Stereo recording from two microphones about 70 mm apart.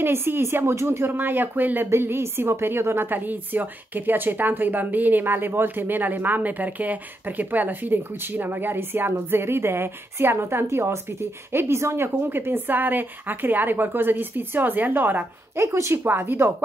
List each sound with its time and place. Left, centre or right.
0.0 s a woman's voice: right
15.6 s speech: right
16.0 s speech: right